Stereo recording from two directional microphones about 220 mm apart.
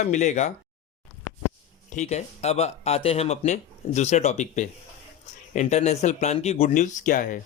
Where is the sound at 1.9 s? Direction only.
30° left (ahead or behind).